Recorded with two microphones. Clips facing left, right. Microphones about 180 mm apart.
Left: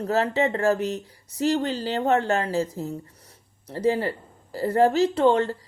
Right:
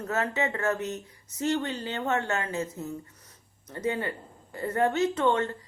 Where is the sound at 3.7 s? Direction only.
30° left (ahead or behind).